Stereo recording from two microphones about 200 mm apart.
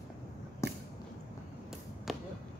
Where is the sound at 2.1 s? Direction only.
Centre (ahead or behind).